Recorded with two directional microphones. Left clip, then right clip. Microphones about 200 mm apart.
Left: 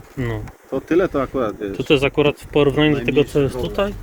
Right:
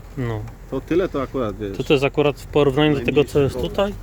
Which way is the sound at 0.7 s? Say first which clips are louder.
Left 3 dB; centre (ahead or behind).